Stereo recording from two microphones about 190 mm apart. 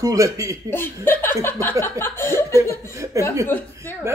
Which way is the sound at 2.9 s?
15° right (ahead or behind).